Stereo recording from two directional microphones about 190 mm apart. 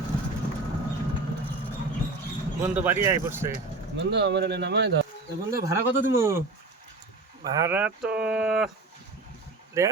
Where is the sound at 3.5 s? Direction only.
65° right (ahead or behind).